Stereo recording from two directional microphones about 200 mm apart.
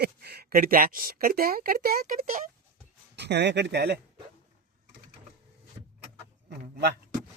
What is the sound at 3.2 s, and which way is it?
Speech, 60° right (ahead or behind).